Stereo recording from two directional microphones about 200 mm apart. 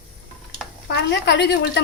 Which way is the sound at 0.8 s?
60° left (ahead or behind).